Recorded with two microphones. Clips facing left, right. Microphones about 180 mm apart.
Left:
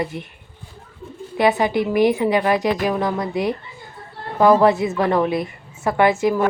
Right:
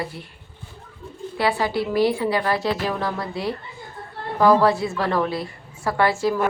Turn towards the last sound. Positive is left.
turn(degrees=20)  # may be behind; listen again after turning